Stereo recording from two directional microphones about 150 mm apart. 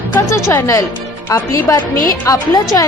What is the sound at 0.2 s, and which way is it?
A woman's voice, 20° left (ahead or behind).